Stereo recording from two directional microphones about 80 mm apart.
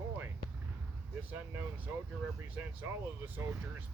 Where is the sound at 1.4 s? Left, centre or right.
Right.